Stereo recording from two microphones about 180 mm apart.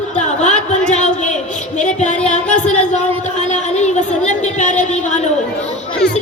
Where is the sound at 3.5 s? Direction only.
40° left (ahead or behind).